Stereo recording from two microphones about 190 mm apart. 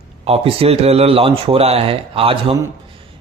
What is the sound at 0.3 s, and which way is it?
Speech, 30° right (ahead or behind).